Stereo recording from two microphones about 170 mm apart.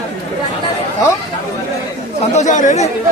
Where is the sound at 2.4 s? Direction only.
45° left (ahead or behind).